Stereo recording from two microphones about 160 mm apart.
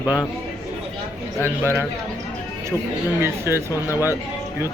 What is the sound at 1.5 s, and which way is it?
Speech, 15° right (ahead or behind).